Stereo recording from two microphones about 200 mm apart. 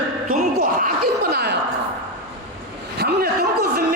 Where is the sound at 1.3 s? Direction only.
55° right (ahead or behind).